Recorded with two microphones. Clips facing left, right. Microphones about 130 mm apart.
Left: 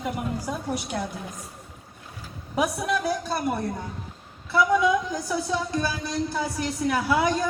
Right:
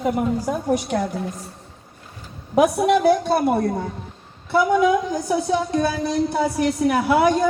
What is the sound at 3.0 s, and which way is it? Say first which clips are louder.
Speech: right 9 dB; 65° right (ahead or behind).